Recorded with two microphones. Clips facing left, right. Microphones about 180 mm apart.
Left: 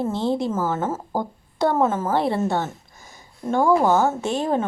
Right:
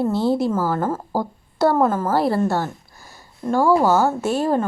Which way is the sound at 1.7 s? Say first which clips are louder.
Right 2 dB; 5° left (ahead or behind).